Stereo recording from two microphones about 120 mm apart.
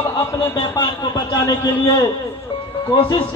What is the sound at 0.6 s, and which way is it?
Speech, 40° left (ahead or behind).